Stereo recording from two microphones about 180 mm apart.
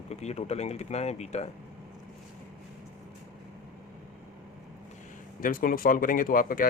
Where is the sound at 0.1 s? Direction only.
35° left (ahead or behind).